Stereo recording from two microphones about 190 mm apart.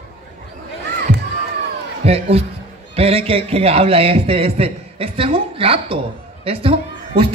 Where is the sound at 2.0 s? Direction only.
30° right (ahead or behind).